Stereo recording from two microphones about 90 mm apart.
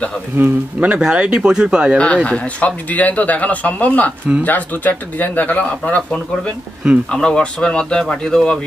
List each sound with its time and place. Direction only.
0.4 s speech: 15° right (ahead or behind)
2.2 s speech: 15° left (ahead or behind)